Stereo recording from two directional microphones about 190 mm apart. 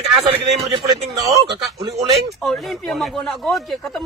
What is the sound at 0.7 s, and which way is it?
Speech, 25° right (ahead or behind).